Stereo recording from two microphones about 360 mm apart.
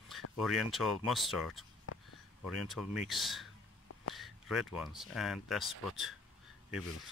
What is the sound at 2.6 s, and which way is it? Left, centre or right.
Speech, centre.